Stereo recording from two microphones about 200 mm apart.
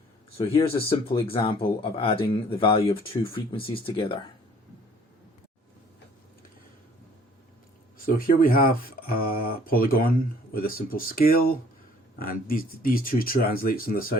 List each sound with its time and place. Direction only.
0.3 s speech: 25° left (ahead or behind)
7.9 s speech: 45° left (ahead or behind)